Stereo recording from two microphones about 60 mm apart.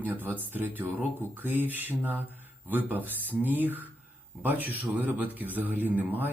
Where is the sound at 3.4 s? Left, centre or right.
Right.